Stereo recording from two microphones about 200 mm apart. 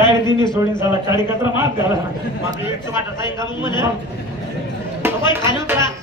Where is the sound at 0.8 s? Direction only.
15° right (ahead or behind).